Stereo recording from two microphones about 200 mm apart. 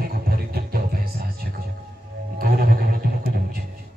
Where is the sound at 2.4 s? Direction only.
50° right (ahead or behind).